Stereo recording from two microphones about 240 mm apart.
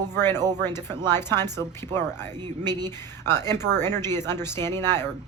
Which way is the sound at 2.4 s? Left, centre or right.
Centre.